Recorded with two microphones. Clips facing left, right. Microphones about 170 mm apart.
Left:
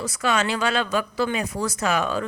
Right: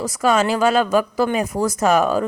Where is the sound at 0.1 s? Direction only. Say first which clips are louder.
Right 7 dB; 40° right (ahead or behind).